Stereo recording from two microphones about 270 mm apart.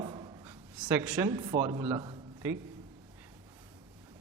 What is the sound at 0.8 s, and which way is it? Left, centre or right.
A man's voice, centre.